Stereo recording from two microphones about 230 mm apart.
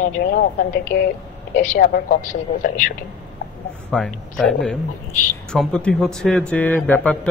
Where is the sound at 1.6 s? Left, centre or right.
Left.